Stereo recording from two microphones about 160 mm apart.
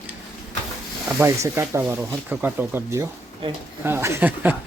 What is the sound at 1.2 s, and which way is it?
Speech, 15° right (ahead or behind).